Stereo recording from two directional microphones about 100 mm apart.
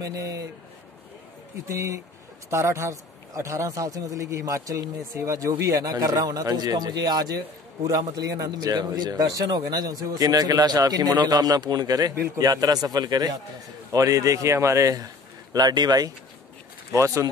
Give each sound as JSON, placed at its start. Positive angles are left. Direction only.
{"t": 0.0, "sound": "a man's voice", "side_deg": -35}
{"t": 1.7, "sound": "a man's voice", "side_deg": -30}
{"t": 16.9, "sound": "a man's voice", "side_deg": -30}